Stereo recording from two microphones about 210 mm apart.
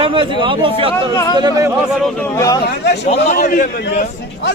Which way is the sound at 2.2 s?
15° left (ahead or behind).